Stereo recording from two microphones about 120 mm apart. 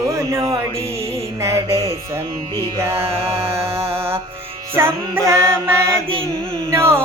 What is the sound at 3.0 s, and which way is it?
Mantra, 55° right (ahead or behind).